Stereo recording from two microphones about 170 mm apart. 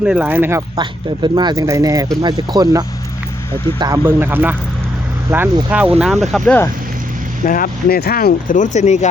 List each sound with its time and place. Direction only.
0.0 s speech: 5° right (ahead or behind)
0.8 s speech: 25° right (ahead or behind)
5.7 s speech: 10° right (ahead or behind)
7.4 s speech: 55° left (ahead or behind)